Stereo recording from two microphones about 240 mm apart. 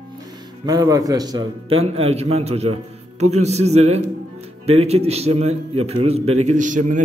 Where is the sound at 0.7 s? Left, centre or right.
Centre.